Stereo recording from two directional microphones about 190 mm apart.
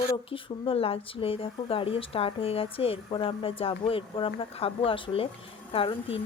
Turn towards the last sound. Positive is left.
turn(degrees=30)  # may be behind; listen again after turning